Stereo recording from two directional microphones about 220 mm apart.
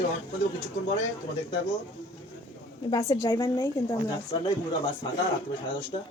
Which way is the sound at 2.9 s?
15° left (ahead or behind).